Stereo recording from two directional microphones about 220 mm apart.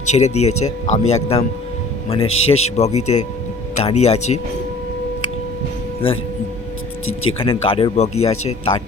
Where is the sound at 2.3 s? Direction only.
65° left (ahead or behind).